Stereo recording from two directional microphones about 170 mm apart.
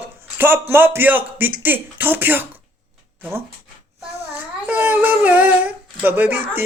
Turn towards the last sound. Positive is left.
turn(degrees=-10)  # may be behind; listen again after turning